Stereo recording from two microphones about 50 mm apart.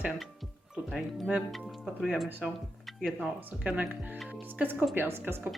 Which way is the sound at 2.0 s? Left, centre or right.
Centre.